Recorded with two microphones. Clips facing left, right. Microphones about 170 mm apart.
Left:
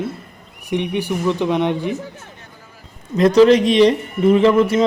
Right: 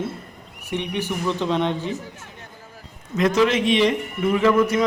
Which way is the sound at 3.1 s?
35° left (ahead or behind).